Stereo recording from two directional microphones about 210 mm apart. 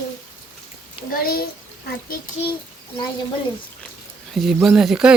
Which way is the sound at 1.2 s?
45° left (ahead or behind).